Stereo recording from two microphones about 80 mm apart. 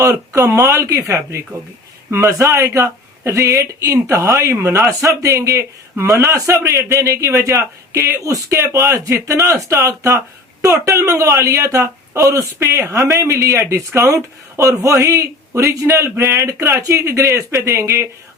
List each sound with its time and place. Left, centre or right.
0.0 s speech: right